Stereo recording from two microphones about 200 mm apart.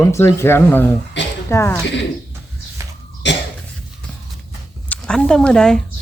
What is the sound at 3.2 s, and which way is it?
Cough, 60° left (ahead or behind).